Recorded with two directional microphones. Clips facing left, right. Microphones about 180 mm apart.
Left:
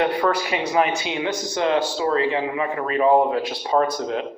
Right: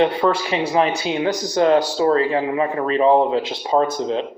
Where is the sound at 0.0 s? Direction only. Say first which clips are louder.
Right 3 dB; 25° right (ahead or behind).